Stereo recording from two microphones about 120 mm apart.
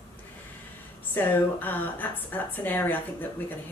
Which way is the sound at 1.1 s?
15° left (ahead or behind).